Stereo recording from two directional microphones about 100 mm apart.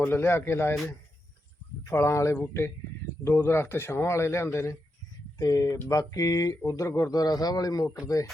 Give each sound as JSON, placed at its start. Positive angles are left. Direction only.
{"t": 0.0, "sound": "a man's voice", "side_deg": 25}
{"t": 1.8, "sound": "a man's voice", "side_deg": 25}